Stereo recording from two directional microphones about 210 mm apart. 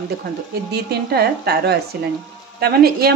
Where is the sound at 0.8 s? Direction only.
50° right (ahead or behind).